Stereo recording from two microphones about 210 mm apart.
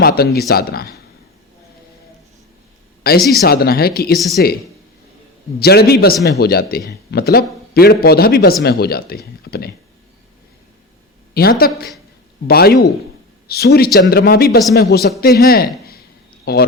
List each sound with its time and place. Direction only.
0.0 s a man's voice: 45° left (ahead or behind)
3.0 s a man's voice: 45° left (ahead or behind)
5.5 s a man's voice: 50° left (ahead or behind)
11.3 s a man's voice: 45° left (ahead or behind)